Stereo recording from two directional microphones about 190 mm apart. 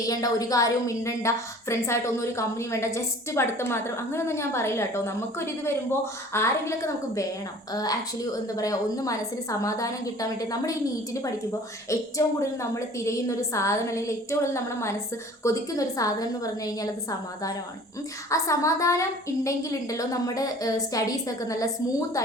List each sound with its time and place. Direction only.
0.1 s a woman's voice: 20° left (ahead or behind)